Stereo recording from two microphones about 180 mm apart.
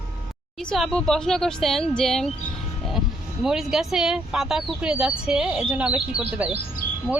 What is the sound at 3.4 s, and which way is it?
A woman's voice, centre (ahead or behind).